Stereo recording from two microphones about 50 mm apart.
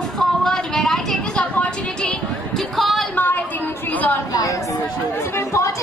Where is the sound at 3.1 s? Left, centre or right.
Left.